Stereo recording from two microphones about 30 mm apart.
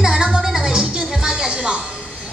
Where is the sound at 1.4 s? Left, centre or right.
Right.